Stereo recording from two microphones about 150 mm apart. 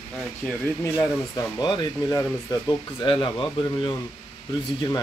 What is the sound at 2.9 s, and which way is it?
Speech, 35° left (ahead or behind).